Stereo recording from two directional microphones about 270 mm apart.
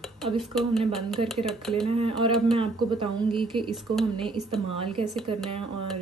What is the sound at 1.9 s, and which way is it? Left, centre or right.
Speech, centre.